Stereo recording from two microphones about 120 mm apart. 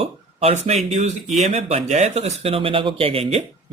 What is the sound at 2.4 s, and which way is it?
Speech, 50° right (ahead or behind).